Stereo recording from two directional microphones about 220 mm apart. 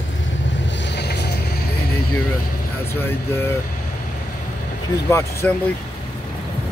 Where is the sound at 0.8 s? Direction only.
50° left (ahead or behind).